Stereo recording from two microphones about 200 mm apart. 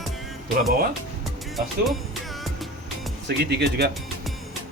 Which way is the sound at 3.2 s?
55° right (ahead or behind).